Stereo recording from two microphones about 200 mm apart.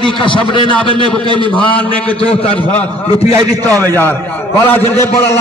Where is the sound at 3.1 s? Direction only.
30° left (ahead or behind).